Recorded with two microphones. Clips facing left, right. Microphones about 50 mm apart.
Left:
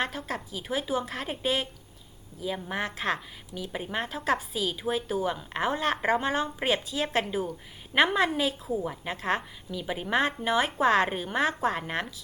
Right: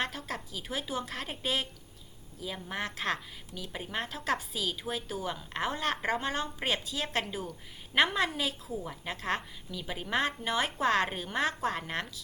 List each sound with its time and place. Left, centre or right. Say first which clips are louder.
0.0 s a woman's voice: left 4 dB; centre
2.6 s a woman's voice: left 2 dB; centre